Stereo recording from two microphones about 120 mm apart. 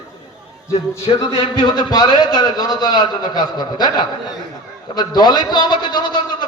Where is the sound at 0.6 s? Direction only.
25° left (ahead or behind).